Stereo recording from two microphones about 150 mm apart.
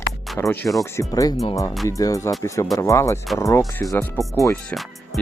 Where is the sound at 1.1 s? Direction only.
25° left (ahead or behind).